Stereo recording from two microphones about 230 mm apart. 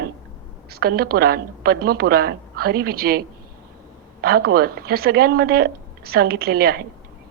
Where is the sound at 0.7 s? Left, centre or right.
Right.